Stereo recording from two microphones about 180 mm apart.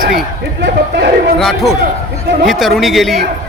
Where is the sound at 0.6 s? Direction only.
70° right (ahead or behind).